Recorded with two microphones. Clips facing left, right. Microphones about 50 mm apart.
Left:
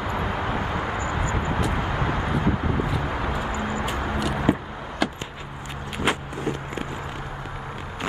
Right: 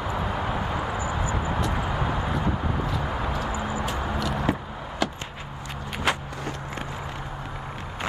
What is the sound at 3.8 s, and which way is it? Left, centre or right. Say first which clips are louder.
Vehicle: left 2 dB; centre.